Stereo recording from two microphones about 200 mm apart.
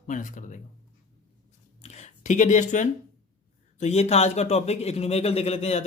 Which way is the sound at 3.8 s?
30° left (ahead or behind).